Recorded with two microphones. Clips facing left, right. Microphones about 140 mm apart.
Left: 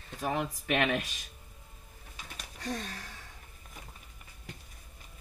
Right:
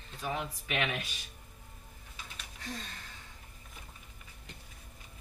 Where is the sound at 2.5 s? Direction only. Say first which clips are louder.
Left 6 dB; 70° left (ahead or behind).